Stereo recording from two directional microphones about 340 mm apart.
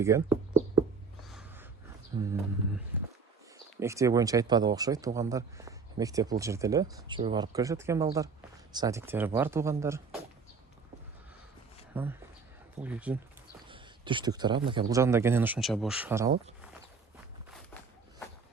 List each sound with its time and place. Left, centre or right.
0.0 s speech: centre
1.3 s gasp: centre
2.1 s speech: centre
2.9 s a sound: centre
3.8 s speech: centre
11.9 s speech: centre
13.7 s speech: centre